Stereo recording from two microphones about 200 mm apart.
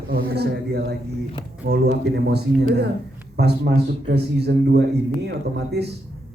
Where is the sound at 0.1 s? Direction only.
50° right (ahead or behind).